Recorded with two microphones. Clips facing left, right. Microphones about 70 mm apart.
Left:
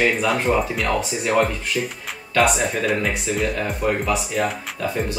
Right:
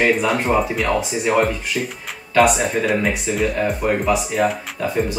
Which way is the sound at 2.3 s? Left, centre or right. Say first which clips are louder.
Right 3 dB; centre.